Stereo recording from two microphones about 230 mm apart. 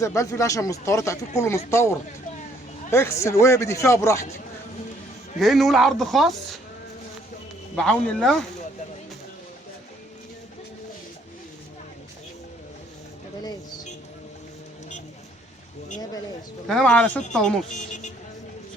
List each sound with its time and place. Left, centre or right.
0.0 s a man's voice: centre
5.4 s speech: centre
7.8 s speech: centre
16.6 s speech: centre
17.7 s speech: left